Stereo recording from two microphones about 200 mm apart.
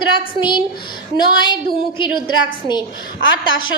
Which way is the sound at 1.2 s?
20° left (ahead or behind).